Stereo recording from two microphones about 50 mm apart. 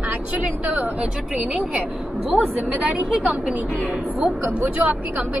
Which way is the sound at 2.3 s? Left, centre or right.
Left.